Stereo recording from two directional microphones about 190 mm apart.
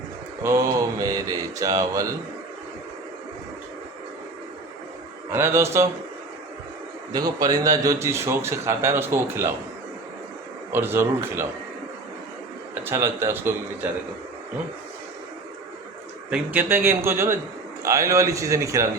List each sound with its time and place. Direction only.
0.4 s a man's voice: 15° right (ahead or behind)
5.3 s a man's voice: 15° right (ahead or behind)
7.1 s a man's voice: 20° right (ahead or behind)
10.7 s a man's voice: 10° right (ahead or behind)
12.8 s a man's voice: 15° right (ahead or behind)
16.3 s a man's voice: 10° right (ahead or behind)